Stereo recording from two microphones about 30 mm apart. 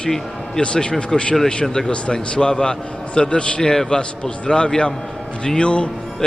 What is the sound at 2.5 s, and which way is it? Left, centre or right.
Speech, left.